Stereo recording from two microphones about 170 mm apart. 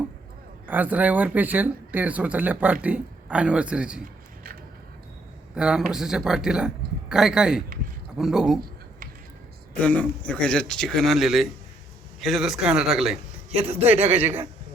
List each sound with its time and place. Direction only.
0.7 s speech: 10° right (ahead or behind)
5.5 s speech: 5° right (ahead or behind)
9.8 s speech: 5° left (ahead or behind)
13.5 s a man's voice: 35° right (ahead or behind)
14.2 s speech: 15° right (ahead or behind)